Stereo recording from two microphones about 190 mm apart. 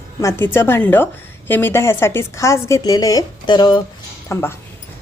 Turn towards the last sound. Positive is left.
turn(degrees=15)  # may be behind; listen again after turning